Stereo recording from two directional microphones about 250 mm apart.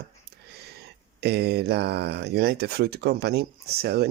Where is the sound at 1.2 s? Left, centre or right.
Right.